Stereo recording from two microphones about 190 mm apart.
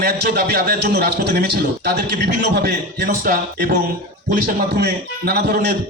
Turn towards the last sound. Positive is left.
turn(degrees=-55)  # may be behind; listen again after turning